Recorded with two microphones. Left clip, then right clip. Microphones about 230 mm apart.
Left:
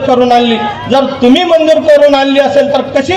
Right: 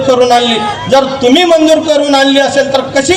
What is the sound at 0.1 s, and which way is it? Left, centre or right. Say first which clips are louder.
A man's voice: even; right.